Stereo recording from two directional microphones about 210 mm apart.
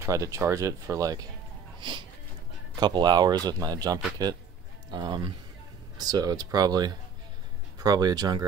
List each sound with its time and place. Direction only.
0.0 s speech: 15° right (ahead or behind)